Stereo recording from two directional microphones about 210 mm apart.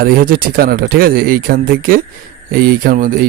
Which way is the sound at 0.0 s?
45° right (ahead or behind).